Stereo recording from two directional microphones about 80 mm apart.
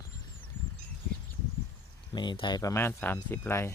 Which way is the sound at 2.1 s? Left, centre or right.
Left.